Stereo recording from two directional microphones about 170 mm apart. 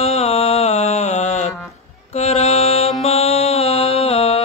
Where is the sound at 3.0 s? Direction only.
35° left (ahead or behind).